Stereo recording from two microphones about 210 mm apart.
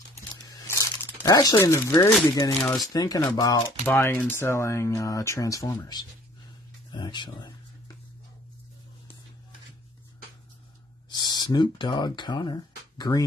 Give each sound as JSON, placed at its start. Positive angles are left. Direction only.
{"t": 0.7, "sound": "crumpling", "side_deg": 15}
{"t": 2.3, "sound": "speech", "side_deg": 15}
{"t": 11.1, "sound": "speech", "side_deg": 20}